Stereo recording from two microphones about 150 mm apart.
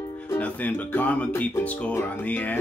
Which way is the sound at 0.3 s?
10° left (ahead or behind).